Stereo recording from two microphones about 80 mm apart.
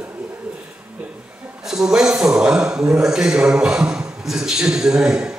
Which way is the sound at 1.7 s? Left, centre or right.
Centre.